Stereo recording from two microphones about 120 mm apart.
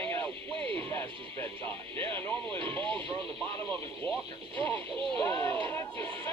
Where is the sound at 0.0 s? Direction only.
15° left (ahead or behind).